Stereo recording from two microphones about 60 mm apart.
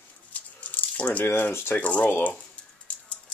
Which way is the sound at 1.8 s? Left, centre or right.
Left.